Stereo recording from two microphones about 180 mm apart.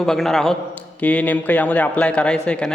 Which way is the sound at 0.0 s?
Centre (ahead or behind).